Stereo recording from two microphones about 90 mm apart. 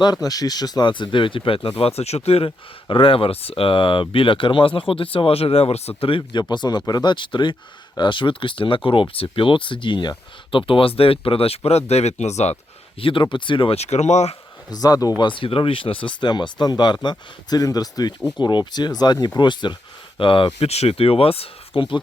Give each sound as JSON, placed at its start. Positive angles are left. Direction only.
{"t": 0.0, "sound": "speech", "side_deg": 45}
{"t": 2.1, "sound": "speech", "side_deg": 55}
{"t": 2.9, "sound": "speech", "side_deg": 80}
{"t": 6.0, "sound": "speech", "side_deg": 80}
{"t": 6.5, "sound": "speech", "side_deg": 55}
{"t": 10.7, "sound": "speech", "side_deg": 90}
{"t": 13.0, "sound": "speech", "side_deg": 75}
{"t": 14.7, "sound": "speech", "side_deg": 45}
{"t": 15.2, "sound": "speech", "side_deg": 70}
{"t": 18.3, "sound": "speech", "side_deg": 55}
{"t": 20.1, "sound": "speech", "side_deg": 70}
{"t": 21.8, "sound": "speech", "side_deg": 70}